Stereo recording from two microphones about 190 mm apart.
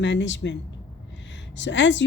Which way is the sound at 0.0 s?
70° left (ahead or behind).